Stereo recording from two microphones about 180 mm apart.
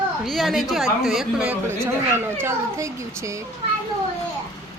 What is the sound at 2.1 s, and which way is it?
Speech, 15° right (ahead or behind).